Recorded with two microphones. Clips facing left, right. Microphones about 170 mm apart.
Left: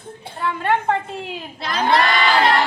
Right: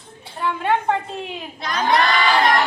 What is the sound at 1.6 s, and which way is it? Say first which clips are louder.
Crowd: left 1 dB; 30° left (ahead or behind).